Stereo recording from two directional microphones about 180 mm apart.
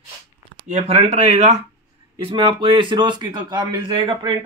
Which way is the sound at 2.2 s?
30° right (ahead or behind).